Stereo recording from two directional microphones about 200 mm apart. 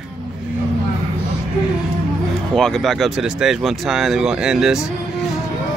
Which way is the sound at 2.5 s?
Centre (ahead or behind).